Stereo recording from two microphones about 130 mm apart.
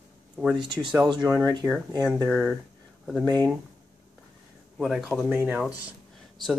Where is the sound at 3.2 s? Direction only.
30° right (ahead or behind).